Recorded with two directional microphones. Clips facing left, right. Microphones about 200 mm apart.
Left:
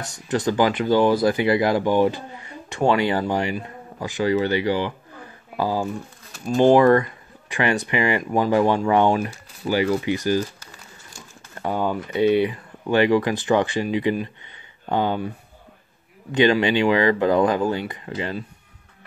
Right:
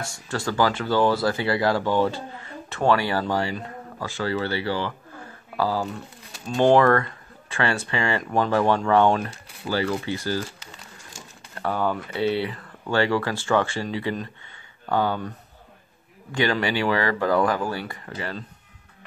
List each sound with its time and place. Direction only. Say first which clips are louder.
0.0 s speech: left 6 dB; 20° left (ahead or behind)
11.5 s speech: left 1 dB; 15° left (ahead or behind)